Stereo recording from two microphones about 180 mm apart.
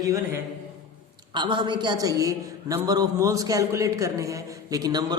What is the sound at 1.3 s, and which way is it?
A man's voice, 25° right (ahead or behind).